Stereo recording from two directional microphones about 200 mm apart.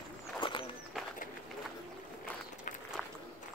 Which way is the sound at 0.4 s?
25° left (ahead or behind).